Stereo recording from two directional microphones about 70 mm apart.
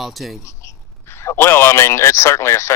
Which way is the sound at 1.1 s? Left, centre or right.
Left.